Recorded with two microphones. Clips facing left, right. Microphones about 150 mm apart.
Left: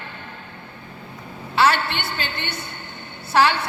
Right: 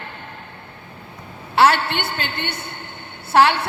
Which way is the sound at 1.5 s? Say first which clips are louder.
Right 3 dB; 60° right (ahead or behind).